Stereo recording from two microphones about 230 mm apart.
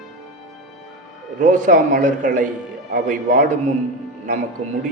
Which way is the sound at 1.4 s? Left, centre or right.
Right.